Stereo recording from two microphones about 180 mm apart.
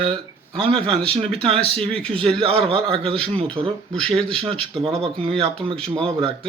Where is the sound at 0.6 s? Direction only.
30° right (ahead or behind).